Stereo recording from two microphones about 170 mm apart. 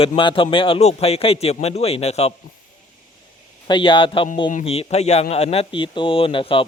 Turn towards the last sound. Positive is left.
turn(degrees=30)  # may be behind; listen again after turning